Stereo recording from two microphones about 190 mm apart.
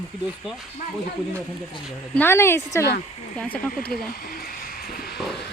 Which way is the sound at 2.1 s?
10° left (ahead or behind).